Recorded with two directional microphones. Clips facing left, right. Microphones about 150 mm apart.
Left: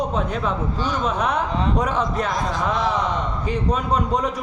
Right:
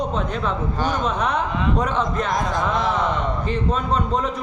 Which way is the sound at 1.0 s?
10° left (ahead or behind).